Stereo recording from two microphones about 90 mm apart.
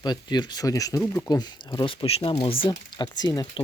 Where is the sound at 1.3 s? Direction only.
50° left (ahead or behind); by 2.7 s 80° left.